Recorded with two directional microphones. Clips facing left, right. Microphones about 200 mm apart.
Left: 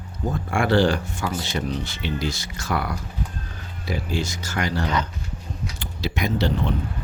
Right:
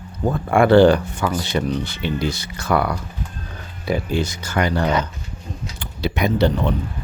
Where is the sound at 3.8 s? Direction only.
60° right (ahead or behind).